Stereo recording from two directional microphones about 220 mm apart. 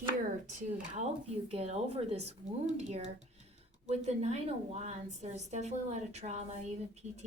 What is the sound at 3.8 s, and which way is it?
A woman's voice, 30° right (ahead or behind).